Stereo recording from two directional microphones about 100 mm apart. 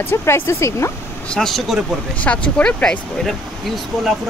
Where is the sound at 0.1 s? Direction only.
25° left (ahead or behind).